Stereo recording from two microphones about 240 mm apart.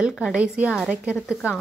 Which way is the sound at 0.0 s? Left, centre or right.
Centre.